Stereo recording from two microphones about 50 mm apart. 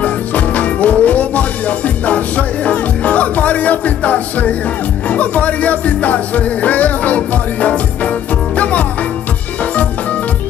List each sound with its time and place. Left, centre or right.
0.0 s music: left